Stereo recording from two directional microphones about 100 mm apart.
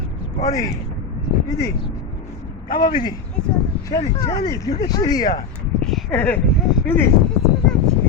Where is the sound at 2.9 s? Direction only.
45° left (ahead or behind).